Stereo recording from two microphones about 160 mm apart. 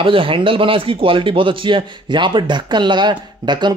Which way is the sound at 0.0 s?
35° right (ahead or behind).